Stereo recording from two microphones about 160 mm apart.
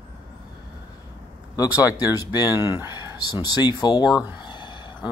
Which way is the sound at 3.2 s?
25° left (ahead or behind).